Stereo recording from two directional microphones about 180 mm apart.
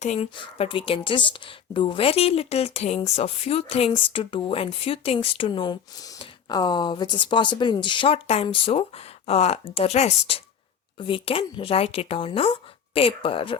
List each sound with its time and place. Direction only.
0.0 s a woman's voice: 40° left (ahead or behind)
0.3 s a woman's voice: 30° left (ahead or behind)